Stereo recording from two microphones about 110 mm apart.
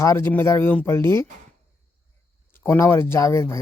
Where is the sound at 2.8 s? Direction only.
25° left (ahead or behind).